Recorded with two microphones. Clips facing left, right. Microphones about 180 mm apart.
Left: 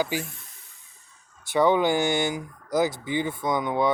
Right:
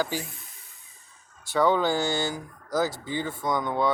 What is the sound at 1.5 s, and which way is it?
Speech, 15° left (ahead or behind).